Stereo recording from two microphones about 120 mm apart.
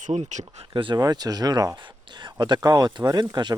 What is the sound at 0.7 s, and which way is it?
Speech, 40° right (ahead or behind).